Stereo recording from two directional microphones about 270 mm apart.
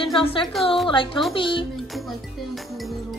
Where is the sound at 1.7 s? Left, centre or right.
Centre.